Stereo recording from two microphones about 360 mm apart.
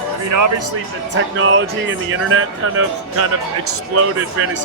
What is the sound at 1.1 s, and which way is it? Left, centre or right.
Speech, right.